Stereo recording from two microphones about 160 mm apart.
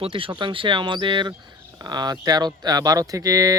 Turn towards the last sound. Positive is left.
turn(degrees=-20)  # may be behind; listen again after turning